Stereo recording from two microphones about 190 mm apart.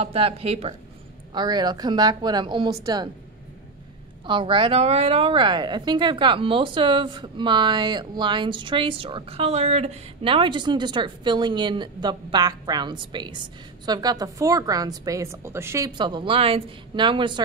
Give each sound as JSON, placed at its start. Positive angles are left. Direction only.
{"t": 0.0, "sound": "a woman's voice", "side_deg": -30}
{"t": 4.3, "sound": "a woman's voice", "side_deg": -25}